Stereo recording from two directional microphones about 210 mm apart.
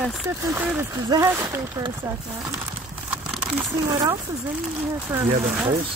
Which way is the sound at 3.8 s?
15° right (ahead or behind).